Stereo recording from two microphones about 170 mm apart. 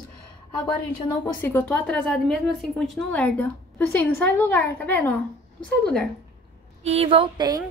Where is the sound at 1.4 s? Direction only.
10° left (ahead or behind).